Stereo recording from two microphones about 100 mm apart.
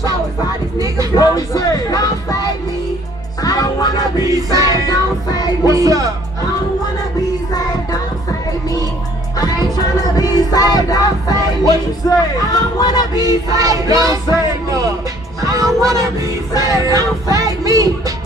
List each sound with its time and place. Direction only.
0.7 s speech: 35° right (ahead or behind)
1.1 s music: 40° left (ahead or behind)
4.3 s music: 35° right (ahead or behind)
4.6 s music: 40° left (ahead or behind)
5.7 s music: 35° right (ahead or behind)
7.5 s music: 40° left (ahead or behind)
9.4 s music: 40° left (ahead or behind)
13.5 s speech: 35° right (ahead or behind)
15.4 s music: 35° right (ahead or behind)